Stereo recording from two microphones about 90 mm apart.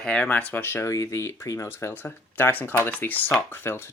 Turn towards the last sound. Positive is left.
turn(degrees=25)  # may be behind; listen again after turning